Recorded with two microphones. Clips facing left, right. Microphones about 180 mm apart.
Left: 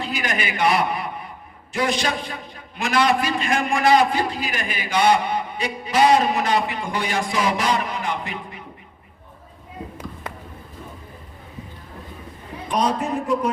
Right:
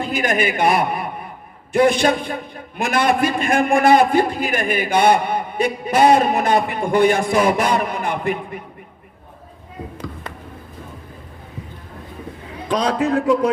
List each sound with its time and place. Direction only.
0.0 s a man's voice: 50° right (ahead or behind)
12.6 s speech: 90° right